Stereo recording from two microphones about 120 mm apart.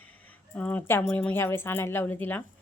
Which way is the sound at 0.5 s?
15° left (ahead or behind).